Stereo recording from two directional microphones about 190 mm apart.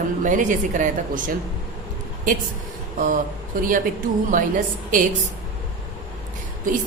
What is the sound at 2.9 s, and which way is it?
Speech, 45° right (ahead or behind).